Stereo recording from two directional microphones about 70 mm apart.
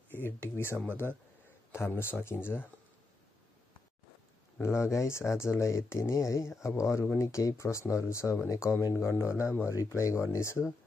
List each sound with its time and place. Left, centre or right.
0.1 s speech: left
4.6 s speech: left
9.5 s speech: left
9.8 s speech: left